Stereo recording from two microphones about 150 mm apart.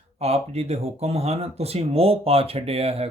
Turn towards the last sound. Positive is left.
turn(degrees=-40)  # may be behind; listen again after turning